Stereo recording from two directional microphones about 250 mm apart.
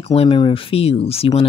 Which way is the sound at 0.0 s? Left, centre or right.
Left.